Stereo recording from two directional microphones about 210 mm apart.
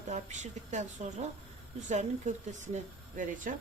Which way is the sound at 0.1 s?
35° right (ahead or behind).